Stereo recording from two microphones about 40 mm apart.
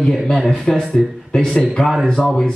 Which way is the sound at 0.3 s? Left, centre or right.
Centre.